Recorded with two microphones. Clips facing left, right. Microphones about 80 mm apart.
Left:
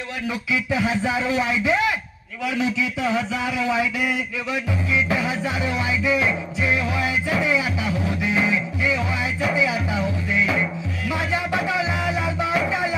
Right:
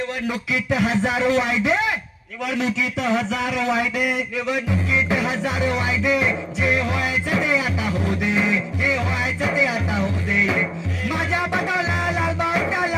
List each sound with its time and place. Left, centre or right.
0.3 s speech: right
5.1 s speech: right
7.4 s music: right
11.7 s music: right